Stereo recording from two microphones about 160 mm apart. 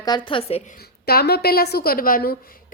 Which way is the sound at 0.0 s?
30° left (ahead or behind).